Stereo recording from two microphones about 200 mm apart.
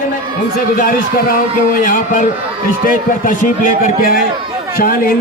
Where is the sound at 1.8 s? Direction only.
40° left (ahead or behind).